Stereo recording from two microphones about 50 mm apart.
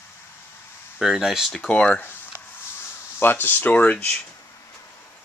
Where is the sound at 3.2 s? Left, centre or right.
Left.